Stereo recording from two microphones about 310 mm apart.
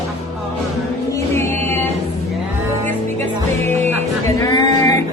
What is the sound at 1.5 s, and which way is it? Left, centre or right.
Music, right.